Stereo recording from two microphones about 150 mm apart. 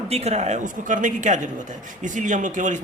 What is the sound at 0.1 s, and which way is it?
A man's voice, 45° right (ahead or behind).